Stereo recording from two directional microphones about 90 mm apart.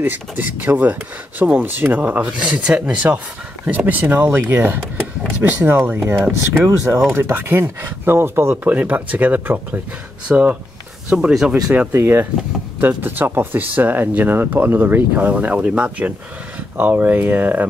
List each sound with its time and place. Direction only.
0.0 s speech: 20° right (ahead or behind)
11.7 s speech: 20° right (ahead or behind)